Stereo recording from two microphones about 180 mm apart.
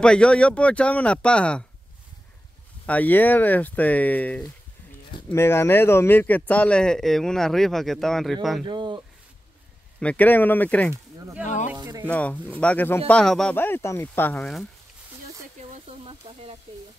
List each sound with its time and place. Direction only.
0.0 s speech: 5° left (ahead or behind)
2.9 s speech: 10° left (ahead or behind)
8.6 s speech: 25° right (ahead or behind)
9.9 s speech: 10° left (ahead or behind)
10.9 s speech: 15° right (ahead or behind)
11.4 s speech: 45° left (ahead or behind)
11.7 s speech: 15° right (ahead or behind)
12.1 s speech: 10° left (ahead or behind)
15.6 s snake: 30° right (ahead or behind)